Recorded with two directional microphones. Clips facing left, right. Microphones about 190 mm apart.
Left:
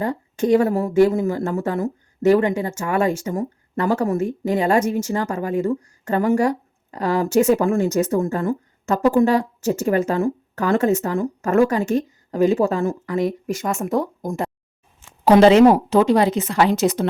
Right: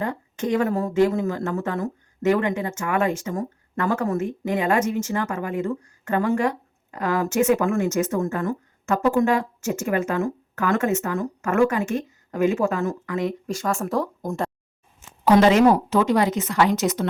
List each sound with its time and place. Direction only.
0.0 s a woman's voice: 30° left (ahead or behind)